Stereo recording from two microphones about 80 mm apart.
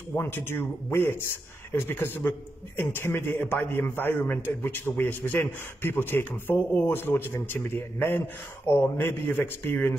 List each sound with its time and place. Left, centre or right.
0.1 s a man's voice: left